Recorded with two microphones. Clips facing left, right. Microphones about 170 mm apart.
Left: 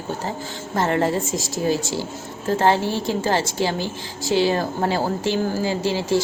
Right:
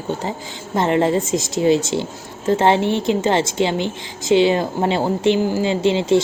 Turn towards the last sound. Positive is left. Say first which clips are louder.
# right 5 dB
turn(degrees=-20)  # may be behind; listen again after turning